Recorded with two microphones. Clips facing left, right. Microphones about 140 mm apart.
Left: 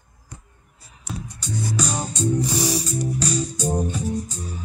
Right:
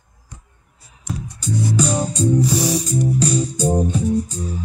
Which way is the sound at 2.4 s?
5° right (ahead or behind).